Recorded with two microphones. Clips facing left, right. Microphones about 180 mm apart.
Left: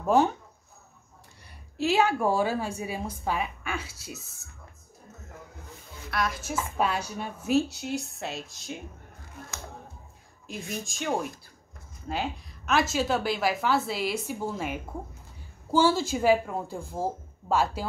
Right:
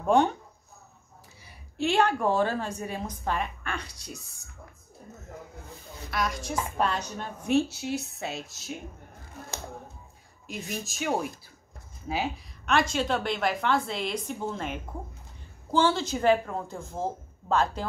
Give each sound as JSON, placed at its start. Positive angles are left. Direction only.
{"t": 0.0, "sound": "a woman's voice", "side_deg": 5}
{"t": 1.4, "sound": "a woman's voice", "side_deg": 0}
{"t": 6.0, "sound": "a woman's voice", "side_deg": 0}
{"t": 10.4, "sound": "a woman's voice", "side_deg": 0}